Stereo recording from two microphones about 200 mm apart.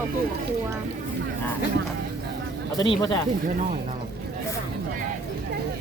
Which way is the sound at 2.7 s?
25° left (ahead or behind).